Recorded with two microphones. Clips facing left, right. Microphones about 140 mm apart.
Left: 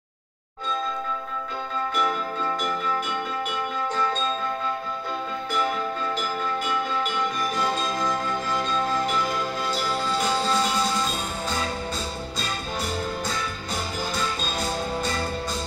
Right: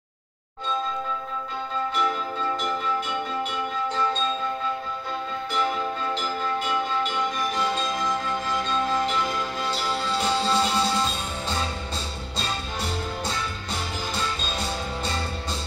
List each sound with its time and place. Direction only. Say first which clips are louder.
9.7 s music: even; 30° right (ahead or behind)